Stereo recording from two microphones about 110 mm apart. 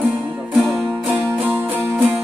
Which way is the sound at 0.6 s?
Centre (ahead or behind).